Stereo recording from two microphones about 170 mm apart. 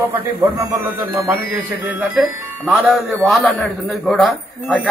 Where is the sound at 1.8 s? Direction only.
5° right (ahead or behind).